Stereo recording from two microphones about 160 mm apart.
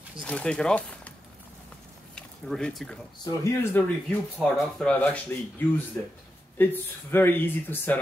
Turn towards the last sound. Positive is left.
turn(degrees=10)  # may be behind; listen again after turning